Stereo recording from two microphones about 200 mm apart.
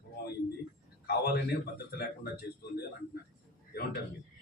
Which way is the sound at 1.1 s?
50° left (ahead or behind).